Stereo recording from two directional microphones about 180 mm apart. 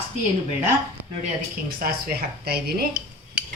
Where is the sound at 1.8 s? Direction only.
55° right (ahead or behind).